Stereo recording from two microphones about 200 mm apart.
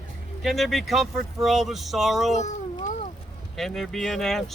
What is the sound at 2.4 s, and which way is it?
Speech, 35° left (ahead or behind).